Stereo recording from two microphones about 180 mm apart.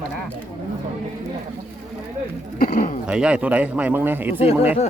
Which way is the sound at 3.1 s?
5° right (ahead or behind).